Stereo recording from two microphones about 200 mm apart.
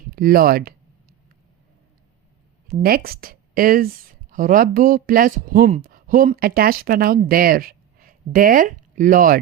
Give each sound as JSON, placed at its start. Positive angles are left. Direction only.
{"t": 0.1, "sound": "speech", "side_deg": -45}
{"t": 2.8, "sound": "speech", "side_deg": -50}